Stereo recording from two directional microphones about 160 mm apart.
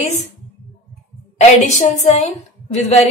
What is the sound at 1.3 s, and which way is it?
Speech, 45° left (ahead or behind).